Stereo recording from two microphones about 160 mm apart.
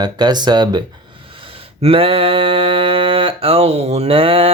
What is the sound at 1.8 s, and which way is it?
Mantra, 35° right (ahead or behind).